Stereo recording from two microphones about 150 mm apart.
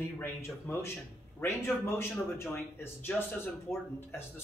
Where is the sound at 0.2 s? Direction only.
15° left (ahead or behind).